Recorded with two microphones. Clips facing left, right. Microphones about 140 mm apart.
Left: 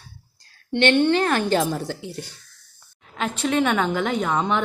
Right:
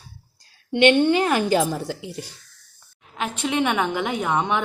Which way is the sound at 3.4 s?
15° right (ahead or behind).